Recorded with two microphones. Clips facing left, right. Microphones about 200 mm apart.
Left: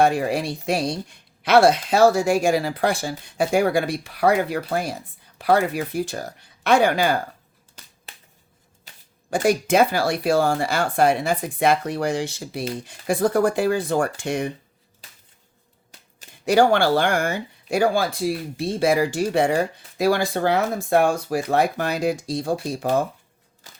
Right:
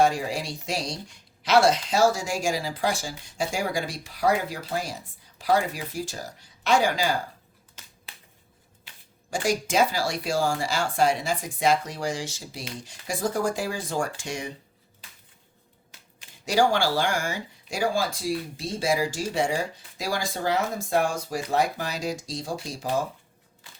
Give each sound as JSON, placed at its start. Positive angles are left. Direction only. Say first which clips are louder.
{"t": 0.0, "sound": "speech", "louder": "left 4 dB", "side_deg": 60}
{"t": 9.3, "sound": "speech", "louder": "left 6 dB", "side_deg": 60}
{"t": 16.5, "sound": "speech", "louder": "left 6 dB", "side_deg": 60}